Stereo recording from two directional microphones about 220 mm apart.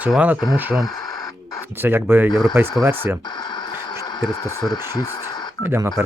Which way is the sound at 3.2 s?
20° left (ahead or behind).